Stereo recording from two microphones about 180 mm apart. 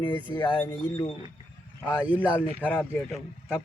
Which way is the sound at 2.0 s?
10° right (ahead or behind).